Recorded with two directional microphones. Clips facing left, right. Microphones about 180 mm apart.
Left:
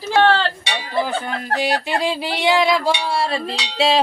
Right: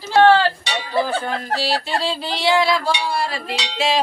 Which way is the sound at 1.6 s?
15° left (ahead or behind).